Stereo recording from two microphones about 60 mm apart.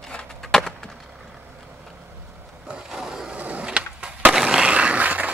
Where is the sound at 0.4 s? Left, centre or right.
Centre.